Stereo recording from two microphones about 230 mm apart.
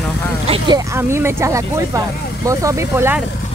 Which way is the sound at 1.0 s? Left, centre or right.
Centre.